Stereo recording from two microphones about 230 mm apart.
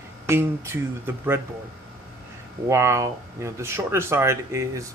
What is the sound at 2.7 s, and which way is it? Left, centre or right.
Speech, centre.